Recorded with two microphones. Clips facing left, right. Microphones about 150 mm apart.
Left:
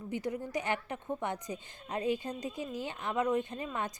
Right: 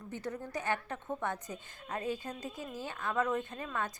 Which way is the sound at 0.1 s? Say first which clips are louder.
Left 4 dB; 15° left (ahead or behind).